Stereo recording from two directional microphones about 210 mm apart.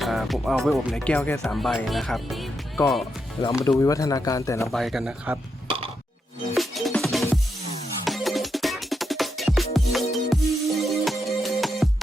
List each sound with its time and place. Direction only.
0.0 s speech: centre (ahead or behind)
3.6 s speech: 15° left (ahead or behind)
4.7 s speech: centre (ahead or behind)
5.6 s a sound: 25° right (ahead or behind)
6.6 s music: centre (ahead or behind)